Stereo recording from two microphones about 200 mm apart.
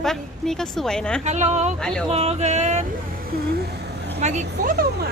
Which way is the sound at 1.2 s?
35° right (ahead or behind).